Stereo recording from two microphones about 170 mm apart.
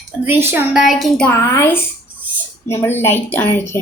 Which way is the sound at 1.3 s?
15° left (ahead or behind).